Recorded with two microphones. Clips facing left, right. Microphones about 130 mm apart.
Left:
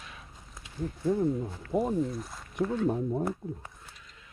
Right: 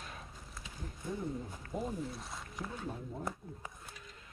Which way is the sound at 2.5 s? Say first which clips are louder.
Left 15 dB; 50° left (ahead or behind).